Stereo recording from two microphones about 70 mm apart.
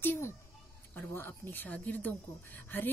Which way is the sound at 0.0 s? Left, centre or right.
Left.